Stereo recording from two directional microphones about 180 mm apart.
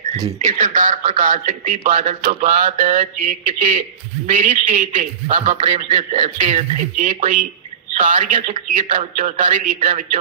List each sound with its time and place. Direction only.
0.3 s speech: 35° right (ahead or behind)